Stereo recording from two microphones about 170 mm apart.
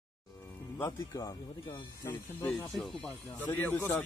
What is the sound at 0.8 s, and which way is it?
Speech, 20° left (ahead or behind).